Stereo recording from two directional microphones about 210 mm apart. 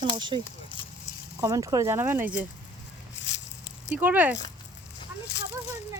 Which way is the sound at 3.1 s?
60° left (ahead or behind).